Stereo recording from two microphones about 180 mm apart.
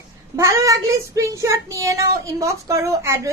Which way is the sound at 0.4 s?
15° right (ahead or behind).